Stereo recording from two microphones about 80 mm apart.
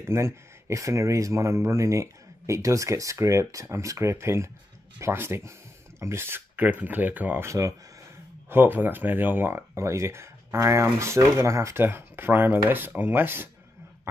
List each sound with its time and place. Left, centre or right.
0.1 s speech: right
7.4 s speech: right
8.5 s speech: right